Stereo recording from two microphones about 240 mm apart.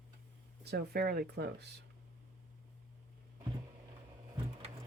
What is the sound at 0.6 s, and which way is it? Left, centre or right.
Speech, right.